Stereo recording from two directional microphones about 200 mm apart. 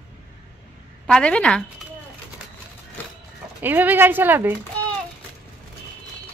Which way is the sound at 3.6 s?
10° right (ahead or behind).